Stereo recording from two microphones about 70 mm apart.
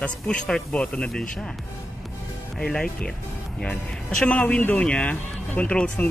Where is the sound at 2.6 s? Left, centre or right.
Centre.